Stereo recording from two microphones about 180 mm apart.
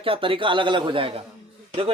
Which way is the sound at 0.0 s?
30° right (ahead or behind).